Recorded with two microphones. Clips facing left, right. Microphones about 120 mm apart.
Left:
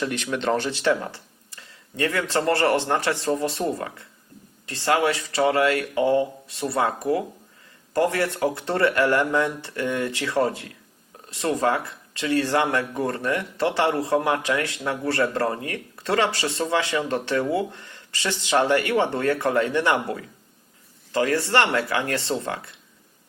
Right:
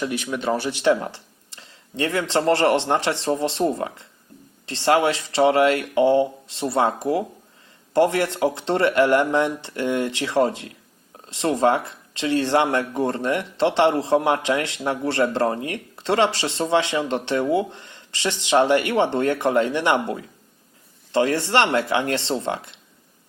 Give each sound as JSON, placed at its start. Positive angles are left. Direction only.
{"t": 0.0, "sound": "speech", "side_deg": -10}